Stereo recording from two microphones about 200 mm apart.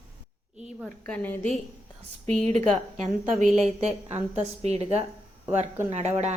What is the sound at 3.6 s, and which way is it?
A woman's voice, 35° right (ahead or behind).